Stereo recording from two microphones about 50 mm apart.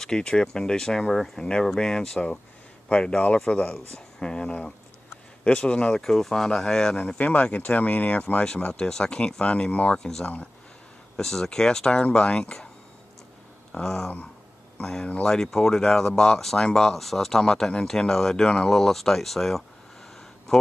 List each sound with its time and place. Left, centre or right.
0.0 s speech: centre
1.4 s a man's voice: centre
6.0 s speech: centre; by 9.9 s left
9.9 s speech: centre
10.2 s speech: left
11.1 s speech: centre
13.7 s a sound: centre
14.8 s speech: centre
18.7 s speech: centre